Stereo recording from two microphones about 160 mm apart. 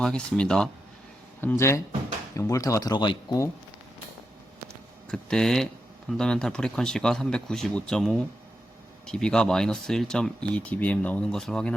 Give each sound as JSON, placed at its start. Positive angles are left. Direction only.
{"t": 0.0, "sound": "speech", "side_deg": 5}
{"t": 1.4, "sound": "speech", "side_deg": 15}
{"t": 5.0, "sound": "speech", "side_deg": 5}